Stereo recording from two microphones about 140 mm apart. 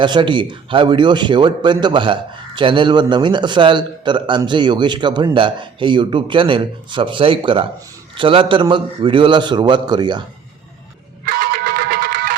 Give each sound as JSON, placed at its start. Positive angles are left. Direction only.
{"t": 0.0, "sound": "a man's voice", "side_deg": -35}
{"t": 11.3, "sound": "music", "side_deg": -90}